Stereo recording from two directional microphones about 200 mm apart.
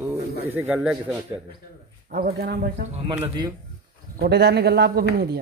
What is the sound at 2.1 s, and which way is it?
Speech, 50° right (ahead or behind).